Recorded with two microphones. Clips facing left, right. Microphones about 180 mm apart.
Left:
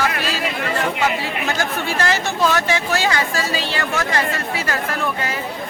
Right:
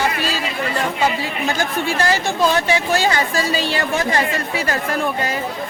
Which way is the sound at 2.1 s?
15° right (ahead or behind).